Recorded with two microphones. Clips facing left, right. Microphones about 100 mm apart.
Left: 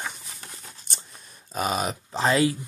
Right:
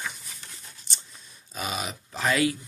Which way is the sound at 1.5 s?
40° left (ahead or behind).